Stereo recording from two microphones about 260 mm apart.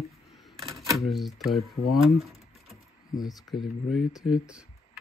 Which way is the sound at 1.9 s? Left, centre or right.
Centre.